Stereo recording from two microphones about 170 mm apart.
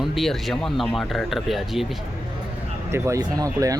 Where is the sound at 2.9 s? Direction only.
15° right (ahead or behind).